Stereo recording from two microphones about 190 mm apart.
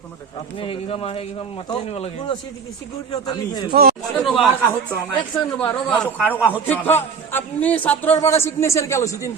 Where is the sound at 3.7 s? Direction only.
55° right (ahead or behind).